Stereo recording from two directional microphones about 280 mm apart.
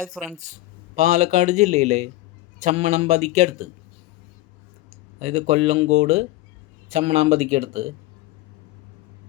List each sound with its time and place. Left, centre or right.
0.2 s speech: centre
0.9 s a man's voice: right
5.2 s a man's voice: right